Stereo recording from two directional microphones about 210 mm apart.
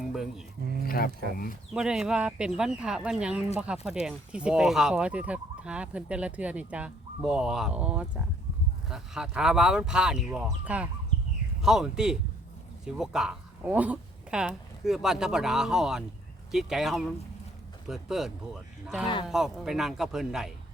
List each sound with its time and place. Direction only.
0.1 s speech: centre (ahead or behind)
0.9 s speech: 45° left (ahead or behind)
1.7 s speech: 5° right (ahead or behind)